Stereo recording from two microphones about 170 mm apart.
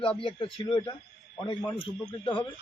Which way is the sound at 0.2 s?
30° left (ahead or behind).